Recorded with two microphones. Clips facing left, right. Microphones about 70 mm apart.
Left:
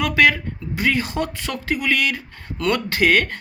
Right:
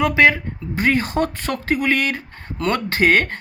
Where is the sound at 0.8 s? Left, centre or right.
Right.